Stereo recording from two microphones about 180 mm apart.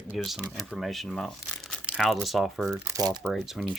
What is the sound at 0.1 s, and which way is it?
Speech, centre (ahead or behind).